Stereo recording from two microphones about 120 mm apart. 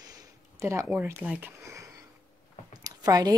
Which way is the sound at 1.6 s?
25° right (ahead or behind).